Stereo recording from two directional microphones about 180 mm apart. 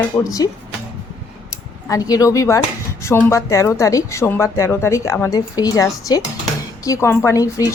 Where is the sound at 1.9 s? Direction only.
20° left (ahead or behind).